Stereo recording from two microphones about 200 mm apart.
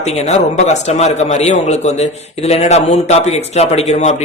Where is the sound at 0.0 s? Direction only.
35° left (ahead or behind).